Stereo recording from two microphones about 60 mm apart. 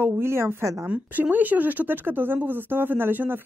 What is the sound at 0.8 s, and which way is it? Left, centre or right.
Speech, right.